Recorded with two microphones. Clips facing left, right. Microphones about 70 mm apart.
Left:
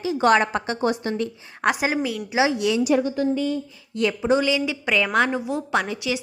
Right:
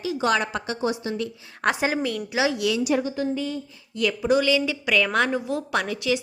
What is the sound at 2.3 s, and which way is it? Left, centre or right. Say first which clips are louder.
Speech: left 3 dB; left.